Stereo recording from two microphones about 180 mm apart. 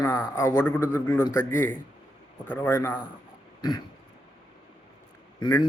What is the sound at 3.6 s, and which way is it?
Throat clearing, 25° left (ahead or behind).